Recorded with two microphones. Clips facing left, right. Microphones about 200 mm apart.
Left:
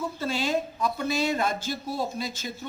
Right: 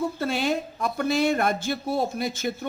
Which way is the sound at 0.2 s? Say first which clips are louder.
Right 2 dB; 60° right (ahead or behind).